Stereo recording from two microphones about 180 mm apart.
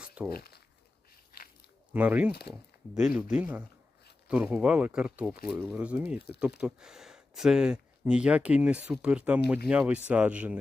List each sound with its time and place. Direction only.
0.0 s a sound: 5° right (ahead or behind)
0.3 s speech: 60° left (ahead or behind)
1.9 s speech: 10° right (ahead or behind)